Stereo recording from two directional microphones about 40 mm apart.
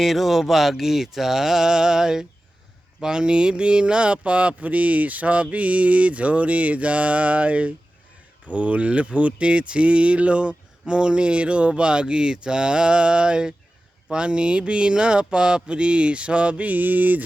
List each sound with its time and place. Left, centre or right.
0.0 s mantra: centre
3.0 s speech: centre
16.6 s mantra: right